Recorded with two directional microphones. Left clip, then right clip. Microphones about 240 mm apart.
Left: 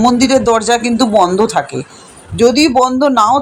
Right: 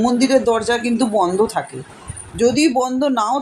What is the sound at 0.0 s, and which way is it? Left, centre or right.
Speech, left.